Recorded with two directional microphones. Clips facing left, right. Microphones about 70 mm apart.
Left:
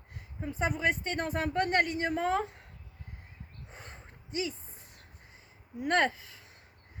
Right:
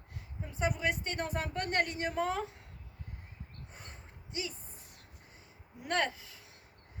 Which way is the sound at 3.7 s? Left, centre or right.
Left.